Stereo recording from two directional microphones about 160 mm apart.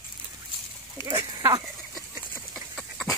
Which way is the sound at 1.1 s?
20° right (ahead or behind).